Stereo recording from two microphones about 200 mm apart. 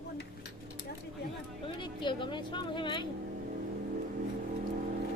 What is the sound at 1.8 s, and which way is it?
Speech, 25° left (ahead or behind).